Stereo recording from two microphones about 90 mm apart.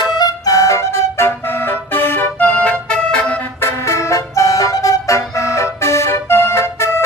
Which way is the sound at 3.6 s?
30° left (ahead or behind).